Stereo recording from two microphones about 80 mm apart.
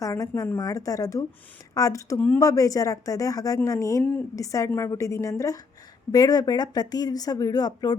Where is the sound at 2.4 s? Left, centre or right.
Left.